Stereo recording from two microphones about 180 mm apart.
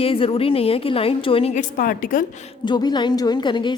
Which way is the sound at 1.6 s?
50° left (ahead or behind).